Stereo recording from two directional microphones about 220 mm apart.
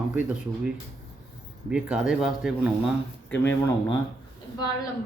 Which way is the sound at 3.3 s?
10° left (ahead or behind).